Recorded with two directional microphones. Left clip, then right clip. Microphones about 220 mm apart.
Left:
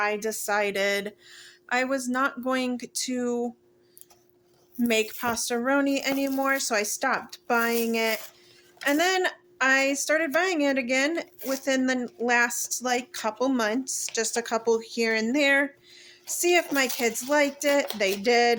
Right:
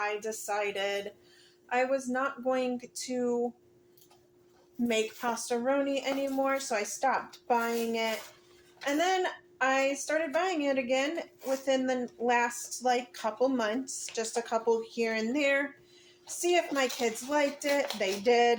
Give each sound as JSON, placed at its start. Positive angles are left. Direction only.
{"t": 0.0, "sound": "a woman's voice", "side_deg": 50}
{"t": 4.8, "sound": "a woman's voice", "side_deg": 45}